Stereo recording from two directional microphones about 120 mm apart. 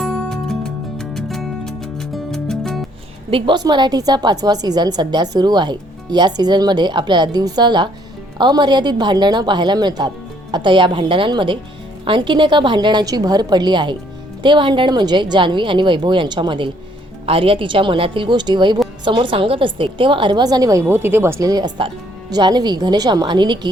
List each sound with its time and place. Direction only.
0.0 s music: 5° left (ahead or behind)
3.2 s a woman's voice: 45° right (ahead or behind)